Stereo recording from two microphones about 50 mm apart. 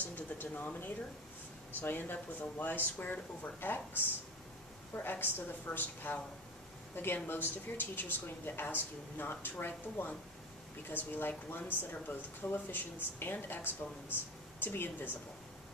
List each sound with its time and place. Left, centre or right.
0.0 s speech: left
7.2 s speech: left